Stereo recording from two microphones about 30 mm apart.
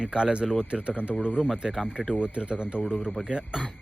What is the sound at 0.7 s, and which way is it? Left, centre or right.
Speech, right.